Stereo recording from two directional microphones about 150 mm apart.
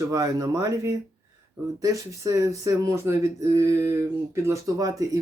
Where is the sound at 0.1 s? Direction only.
25° right (ahead or behind).